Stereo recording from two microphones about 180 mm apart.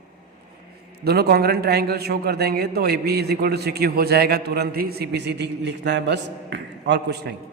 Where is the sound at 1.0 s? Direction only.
60° right (ahead or behind).